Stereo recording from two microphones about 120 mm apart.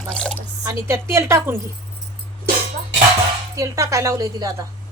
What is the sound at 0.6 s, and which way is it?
Speech, 25° right (ahead or behind).